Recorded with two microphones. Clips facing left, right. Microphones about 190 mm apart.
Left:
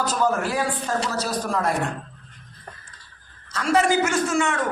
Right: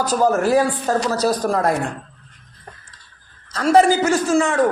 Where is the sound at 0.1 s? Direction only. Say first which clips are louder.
Right 7 dB; 40° right (ahead or behind).